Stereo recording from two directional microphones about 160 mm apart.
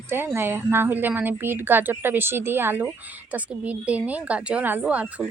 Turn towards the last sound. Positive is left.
turn(degrees=-10)  # may be behind; listen again after turning